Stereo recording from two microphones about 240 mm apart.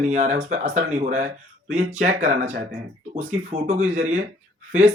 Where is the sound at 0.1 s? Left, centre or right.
Right.